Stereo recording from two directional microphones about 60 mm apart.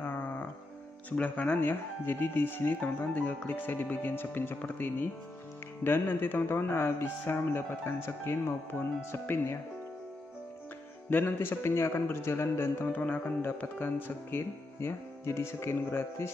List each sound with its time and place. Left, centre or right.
0.0 s music: left
1.1 s speech: left
11.1 s speech: left
12.9 s speech: left
14.8 s speech: left